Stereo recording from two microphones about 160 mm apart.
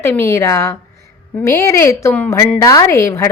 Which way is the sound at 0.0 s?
15° left (ahead or behind).